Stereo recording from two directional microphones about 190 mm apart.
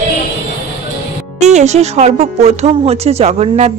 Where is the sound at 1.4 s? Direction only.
35° right (ahead or behind).